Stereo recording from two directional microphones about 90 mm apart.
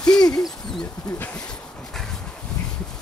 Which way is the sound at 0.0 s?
5° left (ahead or behind).